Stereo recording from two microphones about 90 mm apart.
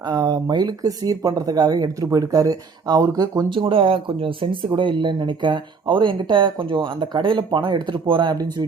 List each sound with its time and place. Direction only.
0.1 s speech: 45° right (ahead or behind)
3.5 s speech: 75° right (ahead or behind)